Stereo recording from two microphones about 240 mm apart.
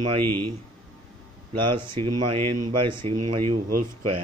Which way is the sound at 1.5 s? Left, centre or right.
Right.